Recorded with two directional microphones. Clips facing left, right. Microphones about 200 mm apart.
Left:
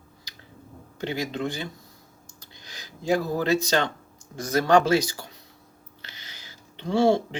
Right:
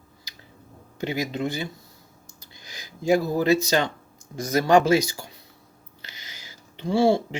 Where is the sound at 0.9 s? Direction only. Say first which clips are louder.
Right 2 dB; 10° right (ahead or behind).